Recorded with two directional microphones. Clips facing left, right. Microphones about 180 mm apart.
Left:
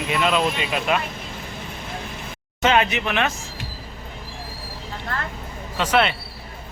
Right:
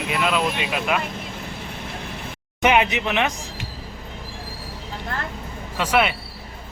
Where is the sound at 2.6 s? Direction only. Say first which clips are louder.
Right 1 dB; 15° right (ahead or behind).